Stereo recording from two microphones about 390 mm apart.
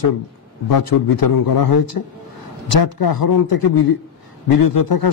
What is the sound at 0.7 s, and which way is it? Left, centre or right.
A man's voice, left.